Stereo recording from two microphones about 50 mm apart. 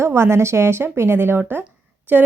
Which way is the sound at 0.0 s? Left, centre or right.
Right.